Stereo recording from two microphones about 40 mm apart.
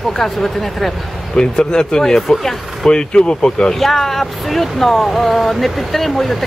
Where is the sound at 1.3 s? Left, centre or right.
Centre.